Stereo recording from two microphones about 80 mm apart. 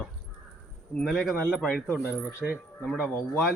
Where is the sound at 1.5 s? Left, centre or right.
Centre.